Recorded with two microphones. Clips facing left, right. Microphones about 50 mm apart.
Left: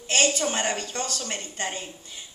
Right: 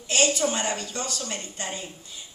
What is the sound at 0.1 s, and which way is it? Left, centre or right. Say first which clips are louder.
A man's voice: even; left.